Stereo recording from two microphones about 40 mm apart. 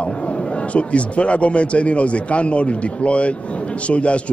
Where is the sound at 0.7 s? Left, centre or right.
Left.